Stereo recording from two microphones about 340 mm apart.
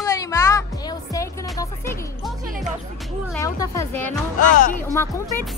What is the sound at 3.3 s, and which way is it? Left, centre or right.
Speech, centre.